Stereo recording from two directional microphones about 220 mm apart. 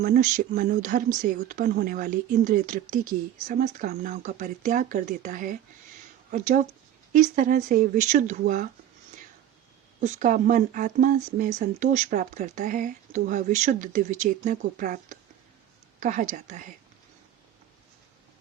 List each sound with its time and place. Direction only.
0.0 s speech: 35° right (ahead or behind)
10.0 s speech: 35° right (ahead or behind)